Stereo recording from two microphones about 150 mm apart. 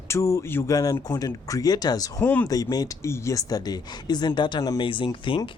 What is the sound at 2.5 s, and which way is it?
Speech, 25° left (ahead or behind).